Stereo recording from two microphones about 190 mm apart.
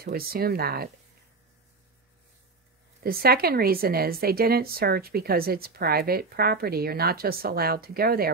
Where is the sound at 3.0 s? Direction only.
50° right (ahead or behind).